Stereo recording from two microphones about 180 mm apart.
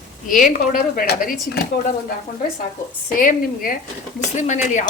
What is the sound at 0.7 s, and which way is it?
Speech, 50° left (ahead or behind).